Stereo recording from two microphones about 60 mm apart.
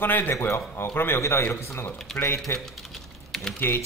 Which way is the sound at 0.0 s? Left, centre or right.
Left.